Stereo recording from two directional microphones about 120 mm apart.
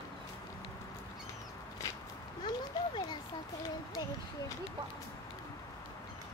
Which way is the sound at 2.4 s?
40° left (ahead or behind).